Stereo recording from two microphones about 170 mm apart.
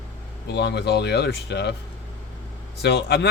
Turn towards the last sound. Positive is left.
turn(degrees=85)